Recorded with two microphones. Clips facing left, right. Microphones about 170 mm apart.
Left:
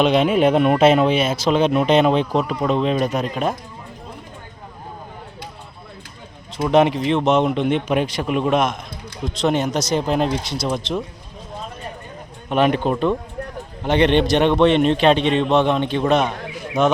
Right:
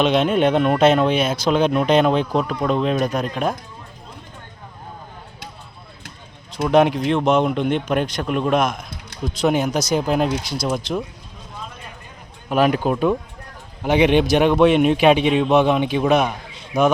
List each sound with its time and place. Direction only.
0.0 s speech: 5° left (ahead or behind)
6.6 s speech: centre (ahead or behind)
12.5 s speech: centre (ahead or behind)
16.4 s a sound: 80° left